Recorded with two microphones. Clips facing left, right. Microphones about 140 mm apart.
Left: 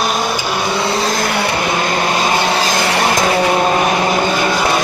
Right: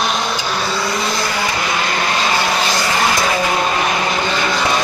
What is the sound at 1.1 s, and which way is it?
Vehicle, 65° left (ahead or behind).